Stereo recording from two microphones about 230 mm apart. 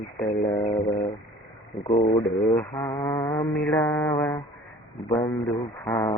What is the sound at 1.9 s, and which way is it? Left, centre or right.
Speech, left.